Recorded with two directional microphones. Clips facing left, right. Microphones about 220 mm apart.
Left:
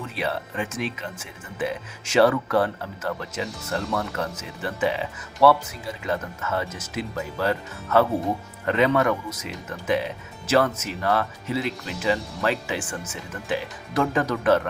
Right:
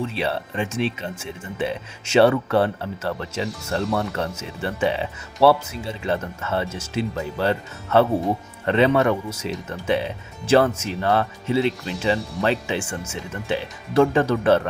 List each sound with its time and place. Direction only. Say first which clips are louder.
0.0 s speech: right 4 dB; 30° right (ahead or behind)